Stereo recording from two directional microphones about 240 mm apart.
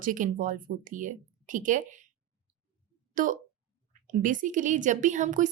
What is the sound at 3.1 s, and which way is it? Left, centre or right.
A woman's voice, right.